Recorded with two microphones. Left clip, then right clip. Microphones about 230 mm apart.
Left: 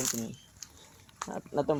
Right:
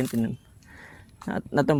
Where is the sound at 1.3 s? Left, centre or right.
Right.